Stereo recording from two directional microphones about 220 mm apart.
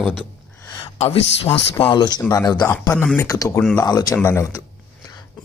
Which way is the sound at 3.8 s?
15° left (ahead or behind).